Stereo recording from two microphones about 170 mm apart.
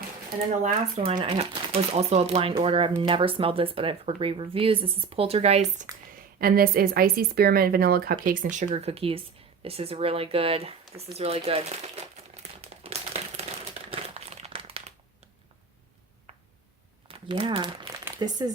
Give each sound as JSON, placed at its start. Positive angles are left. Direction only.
{"t": 0.6, "sound": "speech", "side_deg": -40}
{"t": 6.4, "sound": "speech", "side_deg": -60}
{"t": 9.6, "sound": "a sound", "side_deg": -35}
{"t": 13.9, "sound": "crumpling", "side_deg": -35}
{"t": 17.1, "sound": "speech", "side_deg": -30}
{"t": 18.0, "sound": "a sound", "side_deg": -25}